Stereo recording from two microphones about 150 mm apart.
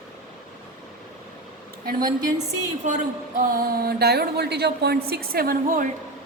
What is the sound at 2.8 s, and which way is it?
A woman's voice, 60° right (ahead or behind).